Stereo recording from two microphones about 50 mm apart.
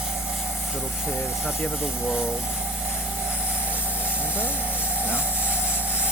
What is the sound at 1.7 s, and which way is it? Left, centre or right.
Vehicle, centre.